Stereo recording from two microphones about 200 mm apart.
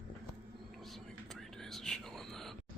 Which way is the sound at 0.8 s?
Centre (ahead or behind).